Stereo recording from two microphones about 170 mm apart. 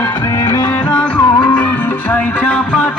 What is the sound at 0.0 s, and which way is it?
Music, 25° left (ahead or behind).